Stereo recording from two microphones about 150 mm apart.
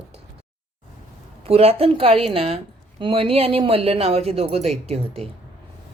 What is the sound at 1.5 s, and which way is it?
Speech, 40° right (ahead or behind).